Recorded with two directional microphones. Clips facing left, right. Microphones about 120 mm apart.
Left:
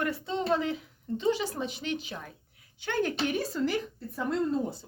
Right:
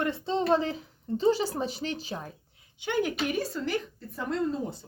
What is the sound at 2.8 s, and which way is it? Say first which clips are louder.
Speech: right 1 dB; 15° right (ahead or behind).